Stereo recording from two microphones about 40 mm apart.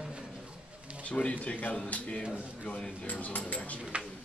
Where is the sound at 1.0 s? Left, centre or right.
Left.